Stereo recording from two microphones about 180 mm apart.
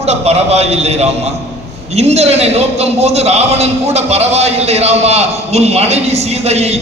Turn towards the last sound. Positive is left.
turn(degrees=-35)  # may be behind; listen again after turning